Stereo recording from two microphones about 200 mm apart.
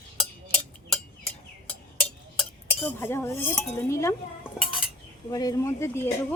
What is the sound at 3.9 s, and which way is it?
Speech, 15° left (ahead or behind).